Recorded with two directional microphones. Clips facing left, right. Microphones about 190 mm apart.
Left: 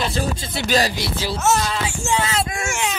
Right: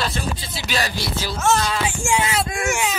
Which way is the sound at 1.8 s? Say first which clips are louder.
Right 1 dB; 15° right (ahead or behind).